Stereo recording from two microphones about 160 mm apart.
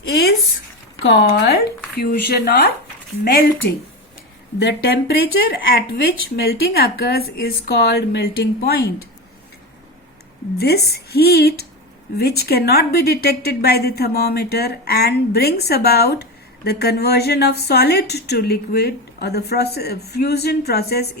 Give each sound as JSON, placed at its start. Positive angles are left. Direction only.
{"t": 0.1, "sound": "a woman's voice", "side_deg": 90}
{"t": 4.6, "sound": "speech", "side_deg": 80}
{"t": 10.6, "sound": "a woman's voice", "side_deg": 90}